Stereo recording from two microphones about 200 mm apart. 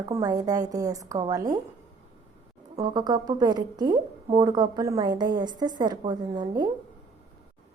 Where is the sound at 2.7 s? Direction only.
20° right (ahead or behind).